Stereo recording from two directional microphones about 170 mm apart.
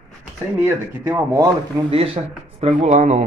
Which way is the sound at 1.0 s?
10° right (ahead or behind).